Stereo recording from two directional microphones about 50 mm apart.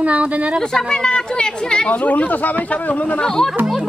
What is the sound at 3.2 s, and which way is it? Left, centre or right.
Speech, centre.